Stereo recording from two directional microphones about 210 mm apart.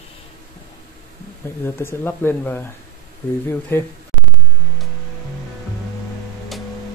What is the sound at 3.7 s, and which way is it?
Speech, 10° left (ahead or behind).